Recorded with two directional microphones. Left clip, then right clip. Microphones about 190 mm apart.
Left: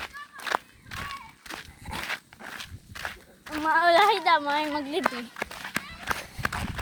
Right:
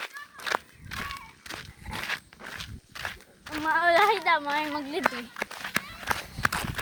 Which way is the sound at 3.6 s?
20° left (ahead or behind).